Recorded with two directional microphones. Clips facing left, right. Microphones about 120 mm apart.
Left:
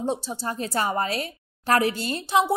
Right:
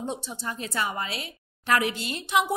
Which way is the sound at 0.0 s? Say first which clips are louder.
Left 5 dB; 35° left (ahead or behind).